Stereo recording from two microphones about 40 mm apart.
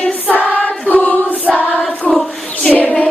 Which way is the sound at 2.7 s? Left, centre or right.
Left.